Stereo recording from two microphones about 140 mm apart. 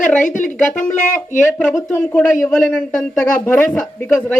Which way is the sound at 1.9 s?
15° left (ahead or behind).